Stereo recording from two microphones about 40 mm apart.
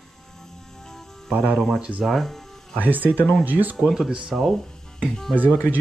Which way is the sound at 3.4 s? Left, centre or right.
Right.